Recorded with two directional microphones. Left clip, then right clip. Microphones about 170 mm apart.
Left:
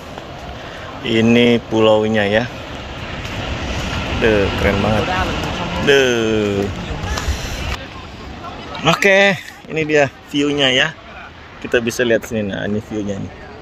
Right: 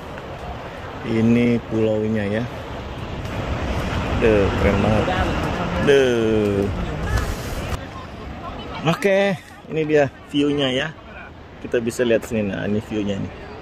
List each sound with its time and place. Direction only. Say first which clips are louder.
1.0 s speech: left 6 dB; centre (ahead or behind)
3.1 s vehicle: left 4 dB; 5° right (ahead or behind)
4.5 s speech: left 3 dB; centre (ahead or behind)
7.2 s a sound: left 3 dB; 5° right (ahead or behind)
8.8 s speech: left 7 dB; centre (ahead or behind)
10.3 s speech: left 6 dB; 25° left (ahead or behind)